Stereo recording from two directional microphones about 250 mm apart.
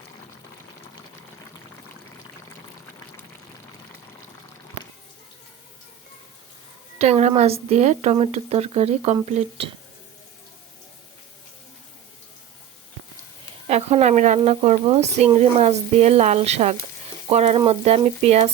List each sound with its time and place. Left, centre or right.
7.0 s speech: right
13.7 s speech: right